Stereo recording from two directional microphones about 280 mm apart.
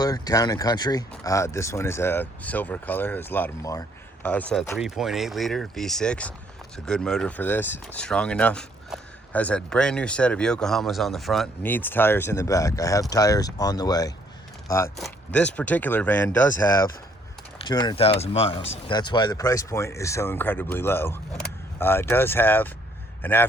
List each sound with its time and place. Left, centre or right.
0.0 s speech: centre
14.9 s speech: centre